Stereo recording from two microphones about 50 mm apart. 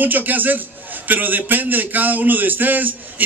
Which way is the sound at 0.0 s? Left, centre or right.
Right.